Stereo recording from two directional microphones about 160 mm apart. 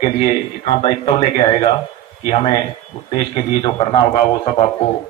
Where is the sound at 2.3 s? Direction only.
30° left (ahead or behind).